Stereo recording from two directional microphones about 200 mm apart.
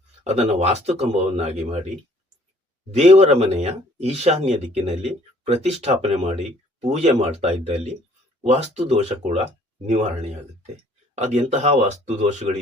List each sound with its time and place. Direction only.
0.3 s speech: 35° right (ahead or behind)
2.9 s speech: 35° right (ahead or behind)